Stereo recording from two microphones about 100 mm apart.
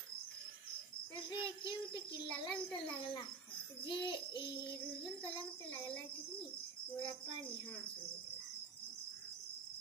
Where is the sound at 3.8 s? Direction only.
55° left (ahead or behind).